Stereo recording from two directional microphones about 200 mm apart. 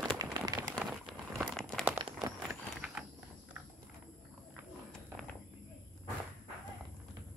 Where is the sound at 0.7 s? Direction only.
Centre (ahead or behind).